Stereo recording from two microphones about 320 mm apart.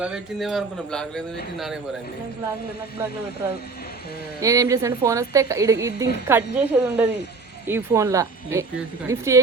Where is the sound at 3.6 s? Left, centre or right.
Left.